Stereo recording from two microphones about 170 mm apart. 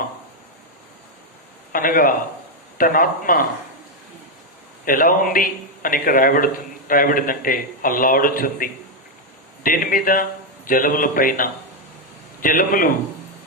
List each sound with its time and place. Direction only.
1.7 s a man's voice: 55° left (ahead or behind)
4.9 s a man's voice: 55° left (ahead or behind)